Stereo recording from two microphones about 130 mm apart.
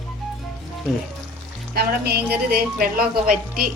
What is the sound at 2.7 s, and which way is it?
Speech, 90° right.